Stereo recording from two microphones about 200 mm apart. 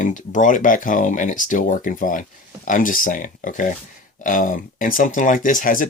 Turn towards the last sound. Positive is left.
turn(degrees=40)  # may be behind; listen again after turning